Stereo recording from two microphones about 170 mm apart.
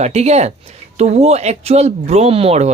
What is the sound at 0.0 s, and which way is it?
Speech, 40° right (ahead or behind).